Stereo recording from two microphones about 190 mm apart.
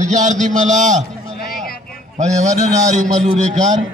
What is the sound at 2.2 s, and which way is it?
A man's voice, 40° right (ahead or behind).